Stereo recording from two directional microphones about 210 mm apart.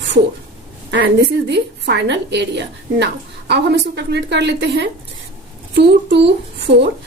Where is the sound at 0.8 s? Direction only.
55° right (ahead or behind).